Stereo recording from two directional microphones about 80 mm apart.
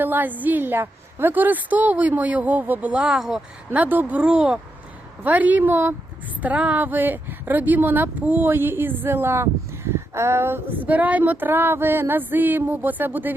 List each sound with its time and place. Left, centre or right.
0.0 s speech: right; by 3.4 s centre
3.7 s speech: right